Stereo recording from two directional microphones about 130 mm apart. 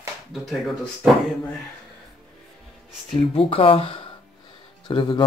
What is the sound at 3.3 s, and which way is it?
Speech, 45° left (ahead or behind).